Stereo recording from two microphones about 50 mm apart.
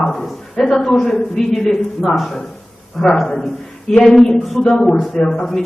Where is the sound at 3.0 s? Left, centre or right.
Centre.